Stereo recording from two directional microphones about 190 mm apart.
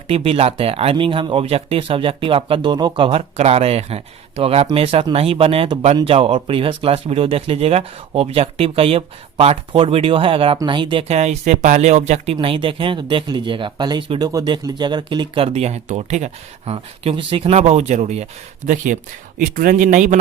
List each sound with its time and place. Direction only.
0.1 s a man's voice: 30° right (ahead or behind)